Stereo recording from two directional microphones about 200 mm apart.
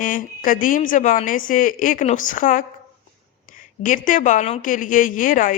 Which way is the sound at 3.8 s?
40° left (ahead or behind).